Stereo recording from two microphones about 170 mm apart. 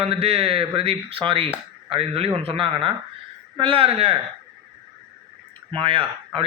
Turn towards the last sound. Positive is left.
turn(degrees=-30)  # may be behind; listen again after turning